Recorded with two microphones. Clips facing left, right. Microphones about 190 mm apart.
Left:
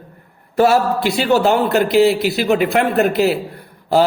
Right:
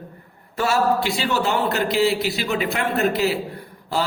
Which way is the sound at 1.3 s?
60° left (ahead or behind).